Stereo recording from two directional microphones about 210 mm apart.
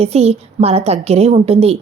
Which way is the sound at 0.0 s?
30° right (ahead or behind).